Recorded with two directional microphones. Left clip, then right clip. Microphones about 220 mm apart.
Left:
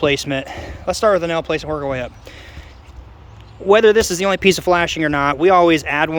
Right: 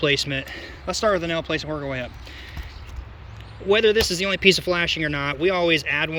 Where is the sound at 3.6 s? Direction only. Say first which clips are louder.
Left 6 dB; 15° left (ahead or behind).